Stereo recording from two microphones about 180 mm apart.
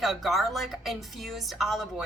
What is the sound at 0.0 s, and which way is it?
A woman's voice, centre (ahead or behind).